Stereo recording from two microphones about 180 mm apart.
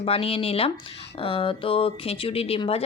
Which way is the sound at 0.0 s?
30° left (ahead or behind).